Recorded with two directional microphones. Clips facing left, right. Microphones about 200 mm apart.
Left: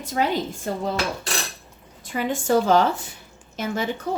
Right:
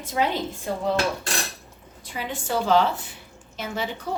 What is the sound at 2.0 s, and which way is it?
A woman's voice, 50° left (ahead or behind).